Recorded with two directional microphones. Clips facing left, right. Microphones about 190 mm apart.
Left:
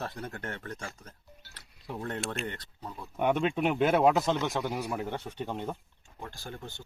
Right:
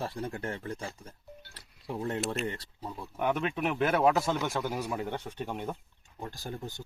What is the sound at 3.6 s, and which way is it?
Speech, 25° left (ahead or behind).